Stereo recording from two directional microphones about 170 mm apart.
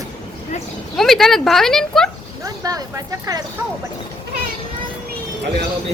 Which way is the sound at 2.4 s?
20° right (ahead or behind).